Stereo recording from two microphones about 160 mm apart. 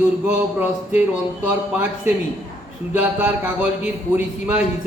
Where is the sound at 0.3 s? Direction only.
10° right (ahead or behind).